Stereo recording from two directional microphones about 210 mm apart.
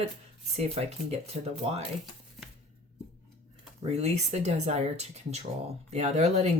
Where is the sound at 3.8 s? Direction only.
30° right (ahead or behind).